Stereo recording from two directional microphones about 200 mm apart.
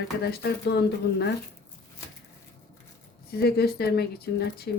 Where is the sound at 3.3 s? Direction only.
50° left (ahead or behind).